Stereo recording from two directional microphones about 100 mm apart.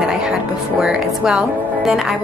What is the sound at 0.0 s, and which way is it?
Speech, 5° right (ahead or behind).